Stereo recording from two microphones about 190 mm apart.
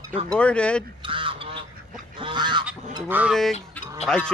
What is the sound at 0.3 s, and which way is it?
Livestock, 5° left (ahead or behind).